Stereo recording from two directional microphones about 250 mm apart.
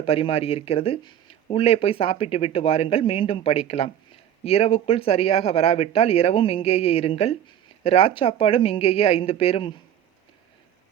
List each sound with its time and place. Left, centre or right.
0.0 s speech: left